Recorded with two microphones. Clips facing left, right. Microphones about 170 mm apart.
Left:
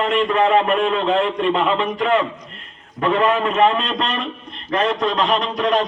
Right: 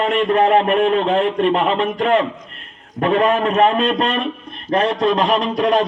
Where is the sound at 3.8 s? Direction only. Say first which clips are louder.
Right 5 dB; 55° right (ahead or behind).